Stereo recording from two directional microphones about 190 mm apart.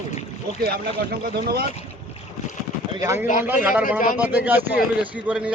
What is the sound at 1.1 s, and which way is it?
Speech, 50° right (ahead or behind).